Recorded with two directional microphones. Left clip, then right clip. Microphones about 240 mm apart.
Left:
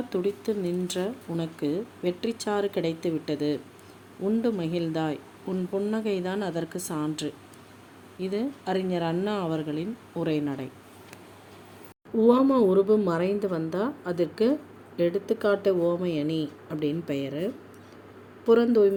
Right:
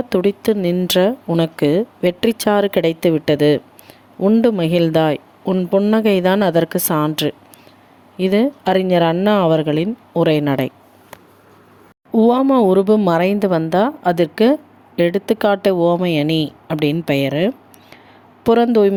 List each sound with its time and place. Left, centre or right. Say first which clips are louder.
0.1 s speech: right 12 dB; right
12.1 s speech: right 7 dB; right